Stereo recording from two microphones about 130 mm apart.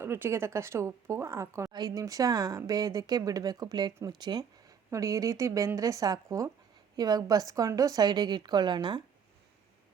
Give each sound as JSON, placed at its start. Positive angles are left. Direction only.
{"t": 0.0, "sound": "speech", "side_deg": -15}
{"t": 1.7, "sound": "a woman's voice", "side_deg": -30}